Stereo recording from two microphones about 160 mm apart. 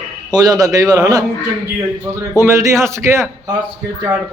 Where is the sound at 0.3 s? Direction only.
25° right (ahead or behind).